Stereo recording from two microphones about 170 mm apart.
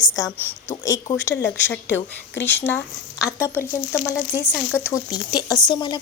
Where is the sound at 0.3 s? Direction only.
15° left (ahead or behind).